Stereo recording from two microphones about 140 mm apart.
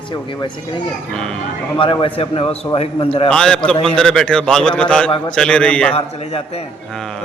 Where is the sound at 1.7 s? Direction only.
40° left (ahead or behind).